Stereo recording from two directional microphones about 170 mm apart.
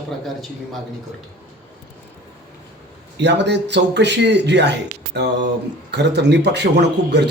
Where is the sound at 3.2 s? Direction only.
90° right.